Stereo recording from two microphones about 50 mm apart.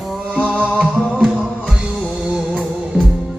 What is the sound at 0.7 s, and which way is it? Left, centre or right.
Music, centre.